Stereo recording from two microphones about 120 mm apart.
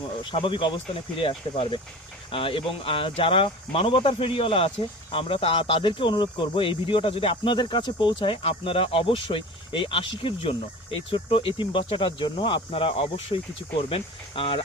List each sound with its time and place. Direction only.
0.3 s speech: 45° left (ahead or behind)